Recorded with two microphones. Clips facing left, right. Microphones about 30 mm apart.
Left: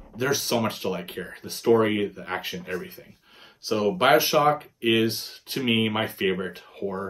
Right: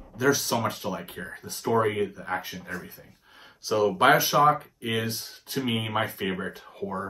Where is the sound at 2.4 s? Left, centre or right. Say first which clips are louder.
Left 4 dB; left.